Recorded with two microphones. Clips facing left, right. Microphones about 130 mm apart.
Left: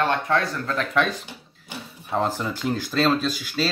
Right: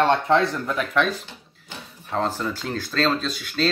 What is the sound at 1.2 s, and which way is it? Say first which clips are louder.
Speech: left 2 dB; 15° left (ahead or behind).